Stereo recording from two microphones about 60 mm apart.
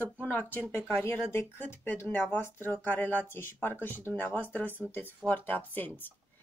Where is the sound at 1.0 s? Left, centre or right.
Left.